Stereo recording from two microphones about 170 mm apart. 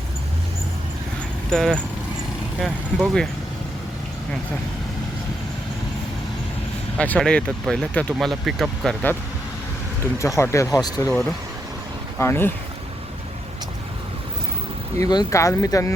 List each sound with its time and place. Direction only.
1.5 s speech: 5° left (ahead or behind)
6.9 s speech: 5° left (ahead or behind)
10.2 s speech: 15° left (ahead or behind)
12.2 s speech: 15° left (ahead or behind)
14.9 s speech: 20° left (ahead or behind)